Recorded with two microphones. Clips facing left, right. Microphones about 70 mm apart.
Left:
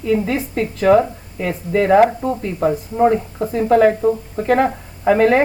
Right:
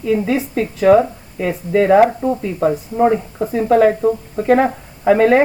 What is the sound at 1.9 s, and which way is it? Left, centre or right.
Speech, centre.